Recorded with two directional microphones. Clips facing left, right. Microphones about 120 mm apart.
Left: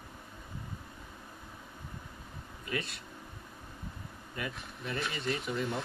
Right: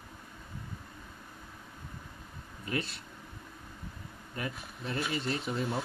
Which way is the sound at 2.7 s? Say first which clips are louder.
Right 2 dB; 30° right (ahead or behind).